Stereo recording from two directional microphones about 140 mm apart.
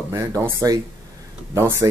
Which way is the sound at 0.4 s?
20° right (ahead or behind).